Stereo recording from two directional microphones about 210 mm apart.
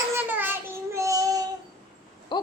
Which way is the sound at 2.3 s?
20° left (ahead or behind).